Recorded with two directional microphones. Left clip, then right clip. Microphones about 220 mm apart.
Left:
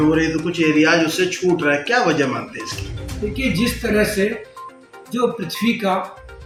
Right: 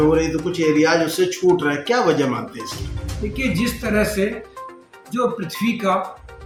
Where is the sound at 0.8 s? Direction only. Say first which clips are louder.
Left 2 dB; 45° right (ahead or behind).